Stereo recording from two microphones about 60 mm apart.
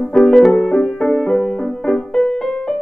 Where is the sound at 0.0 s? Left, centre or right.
Centre.